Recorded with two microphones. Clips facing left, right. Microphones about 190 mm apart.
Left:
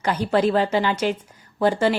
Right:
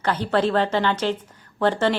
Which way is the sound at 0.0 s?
10° left (ahead or behind).